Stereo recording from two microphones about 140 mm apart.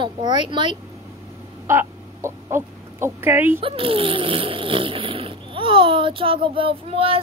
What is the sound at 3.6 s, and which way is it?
Speech, 40° right (ahead or behind).